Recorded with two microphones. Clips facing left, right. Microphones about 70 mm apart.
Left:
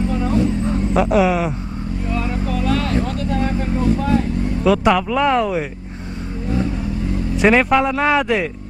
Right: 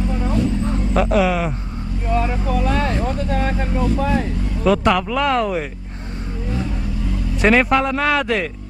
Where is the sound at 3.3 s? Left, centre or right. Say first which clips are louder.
Left 1 dB; right.